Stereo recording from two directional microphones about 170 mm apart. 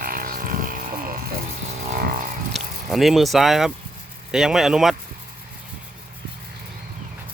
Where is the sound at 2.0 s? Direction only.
55° right (ahead or behind).